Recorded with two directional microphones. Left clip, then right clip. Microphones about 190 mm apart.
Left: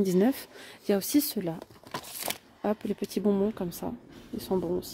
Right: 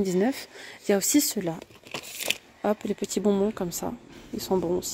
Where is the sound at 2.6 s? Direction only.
Centre (ahead or behind).